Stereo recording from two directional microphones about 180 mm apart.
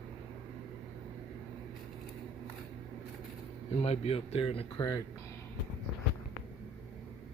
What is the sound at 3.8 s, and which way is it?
Speech, 35° left (ahead or behind).